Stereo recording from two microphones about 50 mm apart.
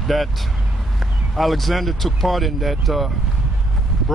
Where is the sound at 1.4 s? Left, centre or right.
Centre.